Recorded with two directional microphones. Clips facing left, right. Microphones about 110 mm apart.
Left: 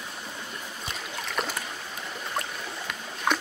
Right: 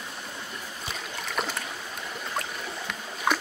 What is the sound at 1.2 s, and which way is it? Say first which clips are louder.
Boat: even; centre (ahead or behind).